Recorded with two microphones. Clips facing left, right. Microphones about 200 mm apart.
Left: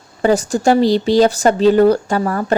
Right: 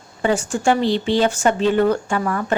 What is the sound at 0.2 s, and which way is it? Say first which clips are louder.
Speech: left 5 dB; 40° left (ahead or behind).